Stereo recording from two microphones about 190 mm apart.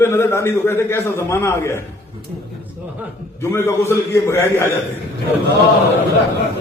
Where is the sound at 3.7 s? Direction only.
15° left (ahead or behind).